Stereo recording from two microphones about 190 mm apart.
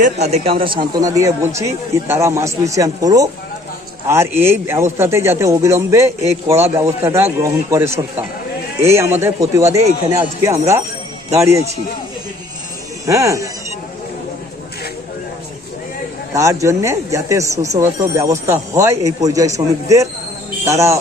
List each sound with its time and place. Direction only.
0.0 s speech: 35° right (ahead or behind); by 8.2 s 10° right (ahead or behind)
9.2 s speech: 15° right (ahead or behind)
13.1 s speech: 15° right (ahead or behind)
16.3 s speech: 15° right (ahead or behind)